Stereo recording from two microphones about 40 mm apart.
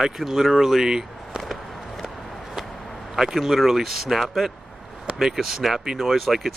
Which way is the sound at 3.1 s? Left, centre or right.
Centre.